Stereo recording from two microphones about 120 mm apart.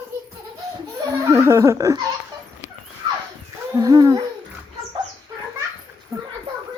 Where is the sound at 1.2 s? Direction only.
25° right (ahead or behind).